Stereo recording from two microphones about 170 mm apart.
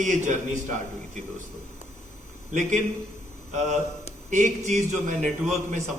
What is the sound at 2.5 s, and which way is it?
Speech, 50° right (ahead or behind).